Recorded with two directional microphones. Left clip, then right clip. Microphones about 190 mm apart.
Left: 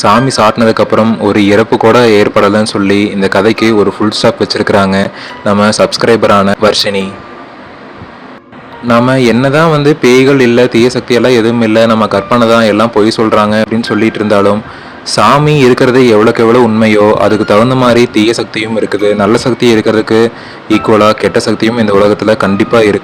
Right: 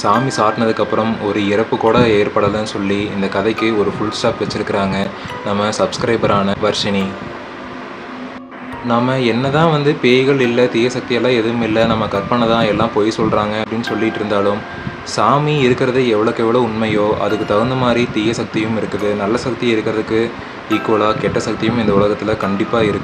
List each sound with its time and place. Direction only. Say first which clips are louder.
0.0 s speech: left 7 dB; 40° left (ahead or behind)
8.9 s speech: left 8 dB; 45° left (ahead or behind)